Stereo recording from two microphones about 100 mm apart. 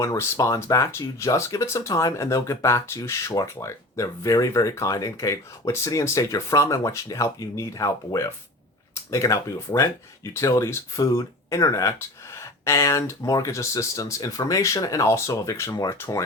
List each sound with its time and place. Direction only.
0.0 s speech: 30° left (ahead or behind)